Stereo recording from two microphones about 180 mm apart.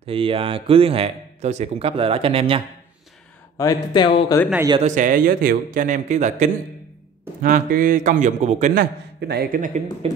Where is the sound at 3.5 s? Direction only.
20° left (ahead or behind).